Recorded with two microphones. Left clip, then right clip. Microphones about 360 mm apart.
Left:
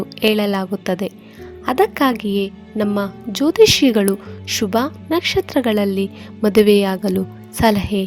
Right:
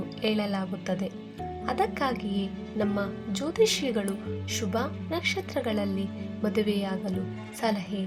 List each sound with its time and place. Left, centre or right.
0.2 s a woman's voice: left